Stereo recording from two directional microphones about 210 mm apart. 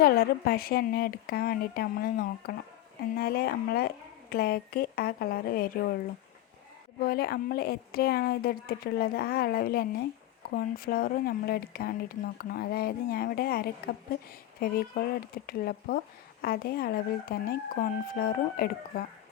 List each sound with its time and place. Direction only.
0.0 s speech: 45° left (ahead or behind)
7.0 s speech: 45° left (ahead or behind)